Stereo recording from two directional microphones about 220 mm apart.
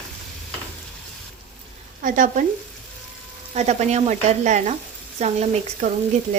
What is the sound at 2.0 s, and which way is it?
Speech, 40° right (ahead or behind).